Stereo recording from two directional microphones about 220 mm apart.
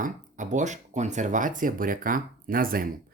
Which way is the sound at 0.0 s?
35° right (ahead or behind).